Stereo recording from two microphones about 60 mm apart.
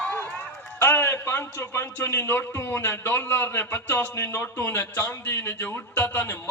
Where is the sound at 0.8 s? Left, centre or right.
Left.